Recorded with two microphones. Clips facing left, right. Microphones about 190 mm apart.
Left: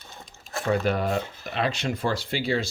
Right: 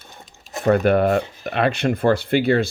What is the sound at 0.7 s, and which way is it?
Speech, 60° right (ahead or behind).